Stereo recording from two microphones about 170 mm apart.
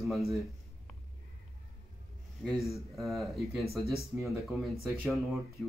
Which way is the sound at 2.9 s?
Centre (ahead or behind).